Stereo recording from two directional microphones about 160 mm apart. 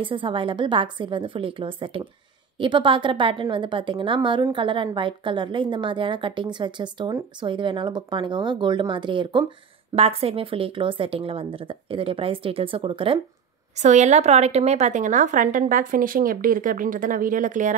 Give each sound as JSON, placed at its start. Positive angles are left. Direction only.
{"t": 0.0, "sound": "a woman's voice", "side_deg": -30}
{"t": 13.7, "sound": "a woman's voice", "side_deg": -45}